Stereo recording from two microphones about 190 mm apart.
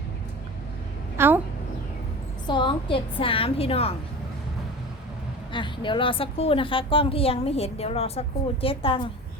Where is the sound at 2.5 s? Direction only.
25° left (ahead or behind).